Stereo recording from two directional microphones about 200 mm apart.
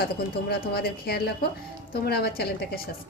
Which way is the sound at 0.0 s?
50° left (ahead or behind).